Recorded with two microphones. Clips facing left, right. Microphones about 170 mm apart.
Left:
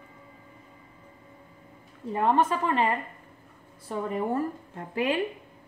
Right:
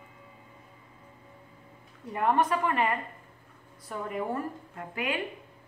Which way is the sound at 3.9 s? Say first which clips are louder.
Left 4 dB; 30° left (ahead or behind).